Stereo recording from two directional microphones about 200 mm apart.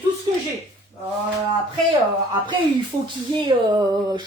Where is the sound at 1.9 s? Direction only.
25° right (ahead or behind).